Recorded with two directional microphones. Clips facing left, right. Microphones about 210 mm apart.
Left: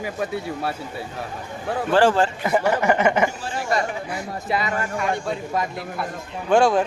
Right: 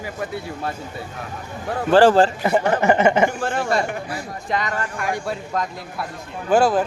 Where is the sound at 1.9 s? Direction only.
35° right (ahead or behind).